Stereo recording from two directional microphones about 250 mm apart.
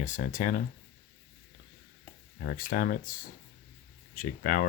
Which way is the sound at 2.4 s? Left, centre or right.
Left.